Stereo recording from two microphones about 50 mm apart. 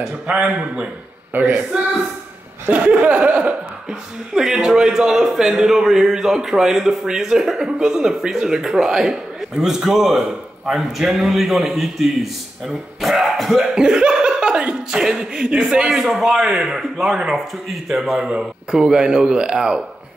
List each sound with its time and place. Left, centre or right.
0.0 s a man's voice: centre
1.3 s speech: right
2.7 s a sound: right
4.3 s a man's voice: centre
13.7 s speech: centre
16.0 s a man's voice: centre